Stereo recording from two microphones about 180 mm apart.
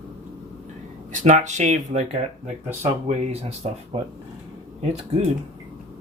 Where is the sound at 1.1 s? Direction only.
40° right (ahead or behind).